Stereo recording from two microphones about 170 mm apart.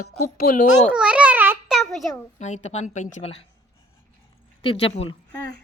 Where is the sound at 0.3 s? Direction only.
55° left (ahead or behind).